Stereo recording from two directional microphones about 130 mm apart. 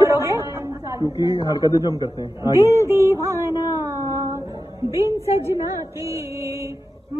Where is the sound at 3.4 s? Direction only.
25° left (ahead or behind).